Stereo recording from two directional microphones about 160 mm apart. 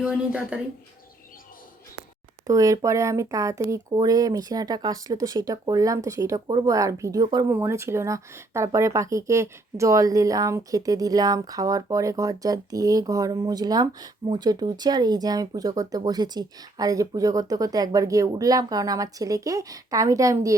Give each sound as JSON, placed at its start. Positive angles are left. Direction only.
{"t": 0.0, "sound": "speech", "side_deg": -10}
{"t": 2.5, "sound": "speech", "side_deg": -20}
{"t": 7.5, "sound": "speech", "side_deg": -15}